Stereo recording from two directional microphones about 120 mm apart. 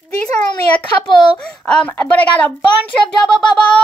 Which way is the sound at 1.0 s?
10° left (ahead or behind).